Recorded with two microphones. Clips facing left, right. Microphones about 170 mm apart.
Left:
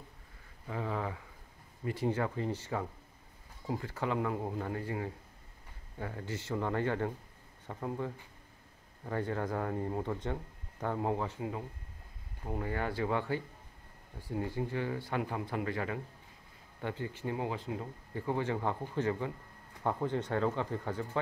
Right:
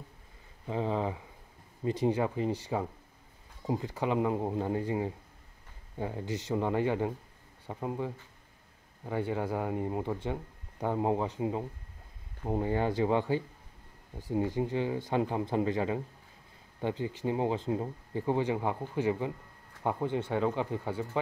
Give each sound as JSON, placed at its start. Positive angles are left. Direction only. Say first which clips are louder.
{"t": 0.7, "sound": "speech", "louder": "right 5 dB", "side_deg": -25}